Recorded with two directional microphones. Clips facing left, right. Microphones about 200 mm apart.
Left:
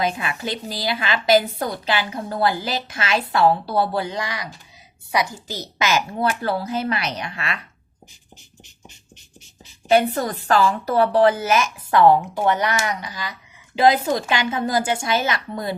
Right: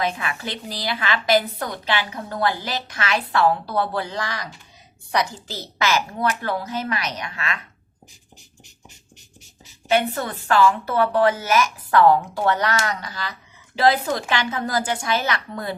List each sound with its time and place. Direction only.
0.2 s a woman's voice: 20° left (ahead or behind)
9.9 s a woman's voice: 40° left (ahead or behind); by 15.7 s 20° left (ahead or behind)